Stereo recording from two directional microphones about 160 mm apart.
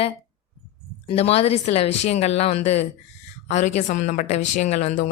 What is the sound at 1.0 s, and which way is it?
A woman's voice, 40° left (ahead or behind).